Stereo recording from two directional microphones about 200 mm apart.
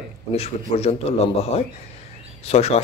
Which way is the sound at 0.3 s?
30° left (ahead or behind).